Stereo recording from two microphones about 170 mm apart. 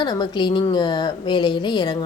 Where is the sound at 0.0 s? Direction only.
25° left (ahead or behind).